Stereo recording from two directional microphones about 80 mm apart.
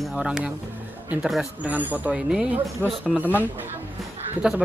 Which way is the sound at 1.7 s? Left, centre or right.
Centre.